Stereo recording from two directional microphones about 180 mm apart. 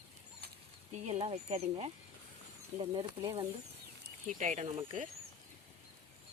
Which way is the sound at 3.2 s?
20° right (ahead or behind).